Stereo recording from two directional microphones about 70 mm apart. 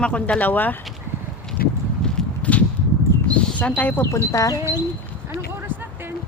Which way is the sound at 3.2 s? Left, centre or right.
Centre.